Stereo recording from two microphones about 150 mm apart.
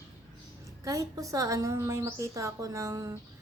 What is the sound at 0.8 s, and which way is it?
A woman's voice, 20° right (ahead or behind).